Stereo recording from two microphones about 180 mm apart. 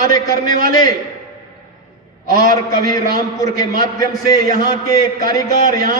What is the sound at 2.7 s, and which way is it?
A man's voice, 20° left (ahead or behind).